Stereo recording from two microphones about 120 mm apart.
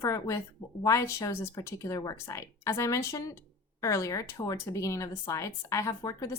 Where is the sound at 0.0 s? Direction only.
25° left (ahead or behind).